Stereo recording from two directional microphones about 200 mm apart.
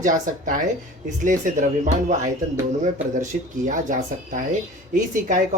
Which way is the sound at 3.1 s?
40° right (ahead or behind).